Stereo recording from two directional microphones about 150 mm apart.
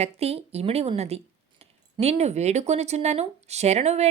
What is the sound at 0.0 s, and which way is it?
Speech, 45° right (ahead or behind).